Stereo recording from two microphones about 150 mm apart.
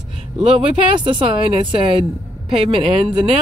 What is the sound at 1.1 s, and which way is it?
Speech, 35° right (ahead or behind).